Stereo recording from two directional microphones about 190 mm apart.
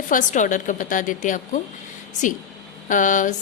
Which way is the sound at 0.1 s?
45° left (ahead or behind).